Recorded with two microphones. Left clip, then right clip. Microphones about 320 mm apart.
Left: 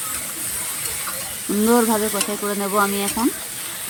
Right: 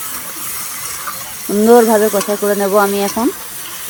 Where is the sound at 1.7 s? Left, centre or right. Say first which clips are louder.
Right 10 dB; right.